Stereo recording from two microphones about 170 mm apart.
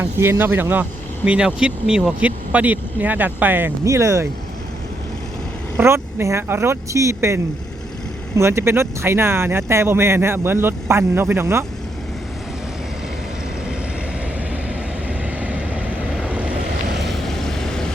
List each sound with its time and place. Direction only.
0.0 s speech: 15° right (ahead or behind)
5.7 s speech: 15° right (ahead or behind)
15.2 s vehicle: 10° right (ahead or behind)
16.2 s waves: 5° right (ahead or behind)
17.1 s vehicle: centre (ahead or behind)